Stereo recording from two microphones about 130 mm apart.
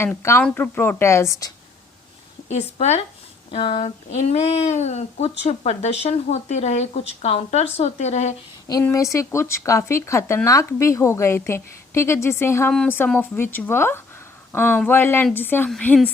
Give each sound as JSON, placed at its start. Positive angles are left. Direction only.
{"t": 0.0, "sound": "speech", "side_deg": 20}
{"t": 2.5, "sound": "speech", "side_deg": 55}
{"t": 3.5, "sound": "speech", "side_deg": 45}
{"t": 8.8, "sound": "a woman's voice", "side_deg": 25}